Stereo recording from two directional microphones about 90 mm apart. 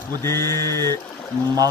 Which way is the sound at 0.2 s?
30° left (ahead or behind).